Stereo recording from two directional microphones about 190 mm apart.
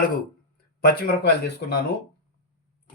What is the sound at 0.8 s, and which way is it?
Speech, 55° left (ahead or behind).